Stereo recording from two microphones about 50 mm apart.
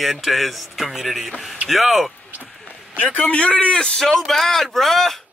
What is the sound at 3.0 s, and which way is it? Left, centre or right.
A man's voice, left.